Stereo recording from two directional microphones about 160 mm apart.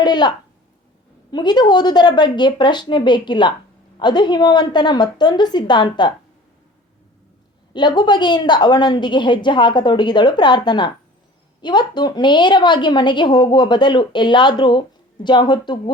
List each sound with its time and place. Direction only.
0.0 s a woman's voice: 25° left (ahead or behind)
7.7 s a woman's voice: 30° left (ahead or behind)